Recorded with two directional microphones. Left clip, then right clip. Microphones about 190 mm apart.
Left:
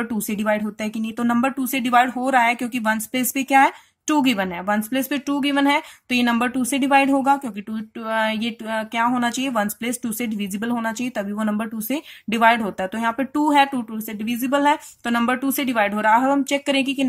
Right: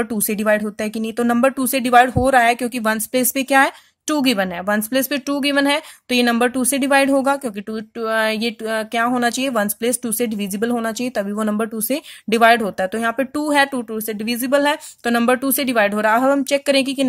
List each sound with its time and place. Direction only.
0.0 s speech: 45° right (ahead or behind)
14.4 s speech: 40° right (ahead or behind)